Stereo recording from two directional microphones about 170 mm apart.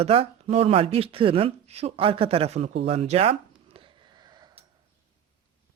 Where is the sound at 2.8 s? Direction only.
40° right (ahead or behind).